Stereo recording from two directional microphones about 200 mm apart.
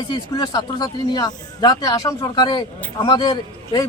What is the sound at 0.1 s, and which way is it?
A man's voice, 20° left (ahead or behind).